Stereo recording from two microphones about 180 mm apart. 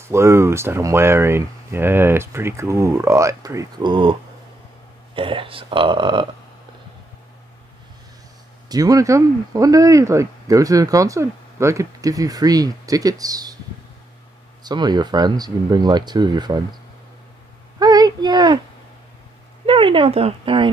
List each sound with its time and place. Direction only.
0.0 s speech: 15° right (ahead or behind)
8.6 s speech: 20° right (ahead or behind)
14.6 s speech: 25° right (ahead or behind)
17.7 s a sound: 20° right (ahead or behind)
19.6 s speech: 30° right (ahead or behind)